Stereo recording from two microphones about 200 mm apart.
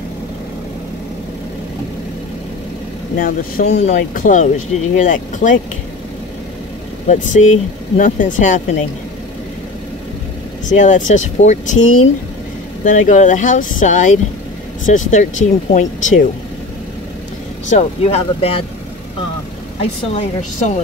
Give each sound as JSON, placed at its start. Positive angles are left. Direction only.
{"t": 3.2, "sound": "speech", "side_deg": 45}
{"t": 7.1, "sound": "speech", "side_deg": 35}
{"t": 10.7, "sound": "speech", "side_deg": 40}
{"t": 17.6, "sound": "speech", "side_deg": 35}
{"t": 19.8, "sound": "speech", "side_deg": 30}